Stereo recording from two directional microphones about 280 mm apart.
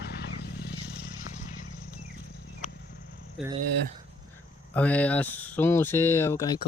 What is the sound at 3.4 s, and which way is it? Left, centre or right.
Speech, centre.